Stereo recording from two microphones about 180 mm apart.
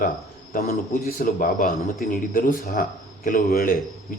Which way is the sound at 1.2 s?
50° left (ahead or behind).